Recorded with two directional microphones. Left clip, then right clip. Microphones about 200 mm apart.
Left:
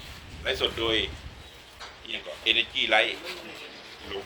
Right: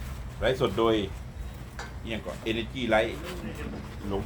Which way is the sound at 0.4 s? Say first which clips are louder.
Right 2 dB; 50° right (ahead or behind).